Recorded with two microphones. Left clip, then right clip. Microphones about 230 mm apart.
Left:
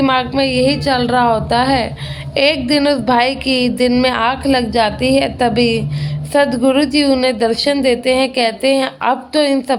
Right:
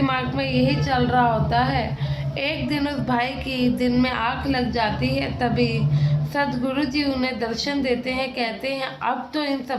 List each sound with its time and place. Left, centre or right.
0.0 s a woman's voice: left